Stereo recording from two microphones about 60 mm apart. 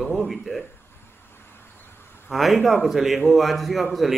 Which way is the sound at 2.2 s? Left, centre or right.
Centre.